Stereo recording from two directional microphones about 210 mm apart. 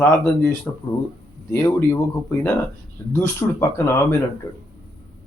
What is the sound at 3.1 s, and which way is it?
Speech, 10° left (ahead or behind).